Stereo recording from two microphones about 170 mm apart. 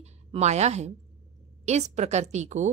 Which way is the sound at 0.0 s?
40° right (ahead or behind).